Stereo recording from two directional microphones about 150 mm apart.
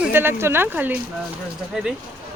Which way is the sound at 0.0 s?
15° right (ahead or behind).